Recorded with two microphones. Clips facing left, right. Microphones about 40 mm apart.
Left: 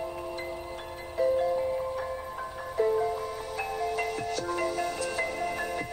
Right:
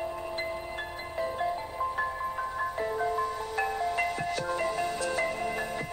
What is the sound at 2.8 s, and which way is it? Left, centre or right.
Music, centre.